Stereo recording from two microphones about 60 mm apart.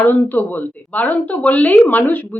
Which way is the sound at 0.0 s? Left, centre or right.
Left.